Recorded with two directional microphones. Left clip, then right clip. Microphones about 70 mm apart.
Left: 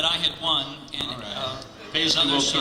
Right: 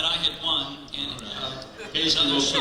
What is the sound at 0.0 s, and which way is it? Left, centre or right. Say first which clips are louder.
A man's voice: left 1 dB; left.